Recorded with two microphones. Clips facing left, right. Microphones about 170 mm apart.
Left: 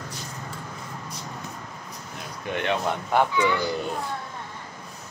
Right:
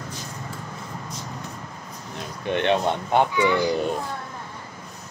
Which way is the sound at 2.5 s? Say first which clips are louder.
Right 4 dB; 25° right (ahead or behind).